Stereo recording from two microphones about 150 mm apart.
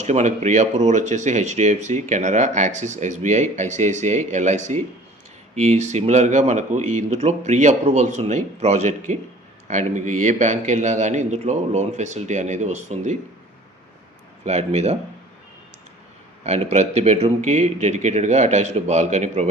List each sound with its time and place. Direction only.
0.0 s speech: 50° right (ahead or behind)
14.4 s speech: 45° right (ahead or behind)
16.4 s speech: 45° right (ahead or behind)